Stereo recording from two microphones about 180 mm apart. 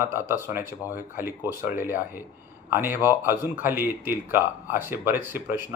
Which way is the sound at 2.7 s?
10° right (ahead or behind).